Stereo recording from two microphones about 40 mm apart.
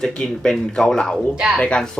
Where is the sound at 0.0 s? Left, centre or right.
Centre.